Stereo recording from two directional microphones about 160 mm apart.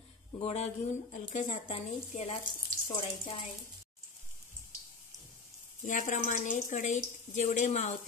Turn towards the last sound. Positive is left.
turn(degrees=45)  # may be behind; listen again after turning